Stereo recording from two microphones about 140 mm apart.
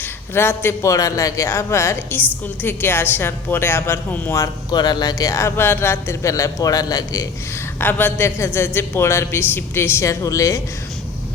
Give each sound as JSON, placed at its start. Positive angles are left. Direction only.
{"t": 0.0, "sound": "a man's voice", "side_deg": 15}
{"t": 7.8, "sound": "a woman's voice", "side_deg": 15}